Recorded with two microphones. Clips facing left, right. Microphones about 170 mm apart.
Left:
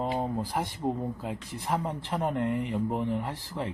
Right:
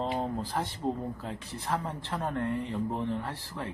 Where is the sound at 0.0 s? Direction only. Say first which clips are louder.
Left 2 dB; 10° left (ahead or behind).